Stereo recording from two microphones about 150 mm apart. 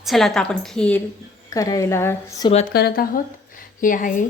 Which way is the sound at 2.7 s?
90° left.